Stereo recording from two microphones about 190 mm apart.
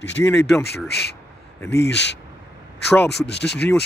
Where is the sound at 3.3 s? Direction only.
60° left (ahead or behind).